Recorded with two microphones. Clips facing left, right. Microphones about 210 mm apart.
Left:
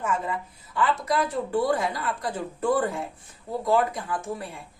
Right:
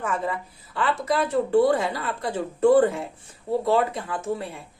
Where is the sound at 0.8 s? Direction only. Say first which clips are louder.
Right 1 dB; 25° right (ahead or behind).